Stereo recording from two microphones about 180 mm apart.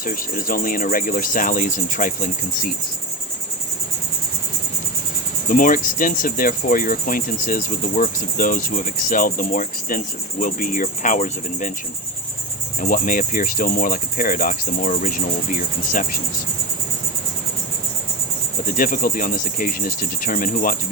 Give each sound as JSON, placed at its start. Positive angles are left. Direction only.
{"t": 0.0, "sound": "cricket", "side_deg": 50}
{"t": 5.5, "sound": "cricket", "side_deg": 50}
{"t": 12.8, "sound": "cricket", "side_deg": 50}
{"t": 18.8, "sound": "cricket", "side_deg": 50}